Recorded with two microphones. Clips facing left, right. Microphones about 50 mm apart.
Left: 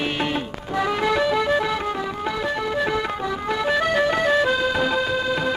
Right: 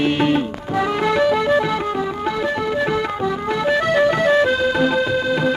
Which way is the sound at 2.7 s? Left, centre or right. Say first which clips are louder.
Right 2 dB; centre.